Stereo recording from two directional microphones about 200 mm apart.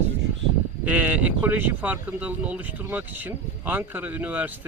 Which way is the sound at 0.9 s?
10° right (ahead or behind).